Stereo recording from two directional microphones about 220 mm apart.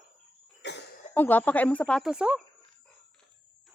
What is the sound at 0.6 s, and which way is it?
Cough, 55° left (ahead or behind).